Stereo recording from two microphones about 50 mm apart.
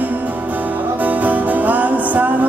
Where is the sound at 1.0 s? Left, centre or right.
Right.